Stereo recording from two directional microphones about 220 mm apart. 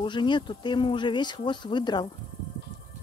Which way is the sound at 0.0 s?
20° left (ahead or behind).